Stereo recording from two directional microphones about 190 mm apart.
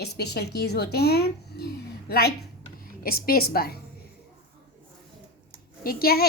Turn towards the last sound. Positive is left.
turn(degrees=50)  # may be behind; listen again after turning